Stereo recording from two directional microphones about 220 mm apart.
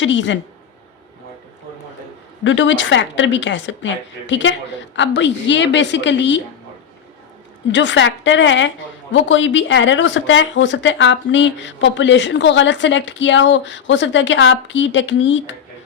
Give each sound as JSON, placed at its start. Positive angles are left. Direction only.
{"t": 0.0, "sound": "speech", "side_deg": 55}
{"t": 2.4, "sound": "a woman's voice", "side_deg": 55}
{"t": 7.7, "sound": "speech", "side_deg": 55}